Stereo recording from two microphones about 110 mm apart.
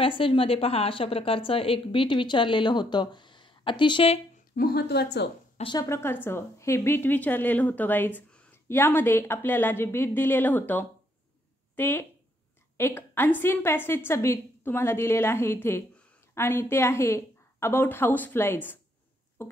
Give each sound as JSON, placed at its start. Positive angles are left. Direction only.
{"t": 0.0, "sound": "a woman's voice", "side_deg": 55}
{"t": 5.8, "sound": "a woman's voice", "side_deg": 25}